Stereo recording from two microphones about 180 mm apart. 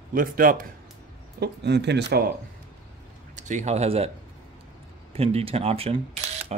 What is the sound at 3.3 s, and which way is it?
Speech, 45° right (ahead or behind).